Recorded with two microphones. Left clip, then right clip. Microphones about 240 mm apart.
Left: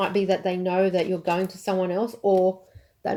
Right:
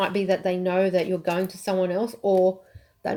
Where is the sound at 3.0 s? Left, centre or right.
Right.